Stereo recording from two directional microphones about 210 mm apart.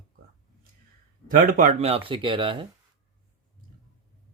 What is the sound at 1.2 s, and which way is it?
Speech, 40° right (ahead or behind).